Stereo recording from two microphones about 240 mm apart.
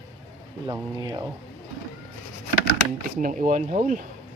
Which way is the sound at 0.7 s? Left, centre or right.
Centre.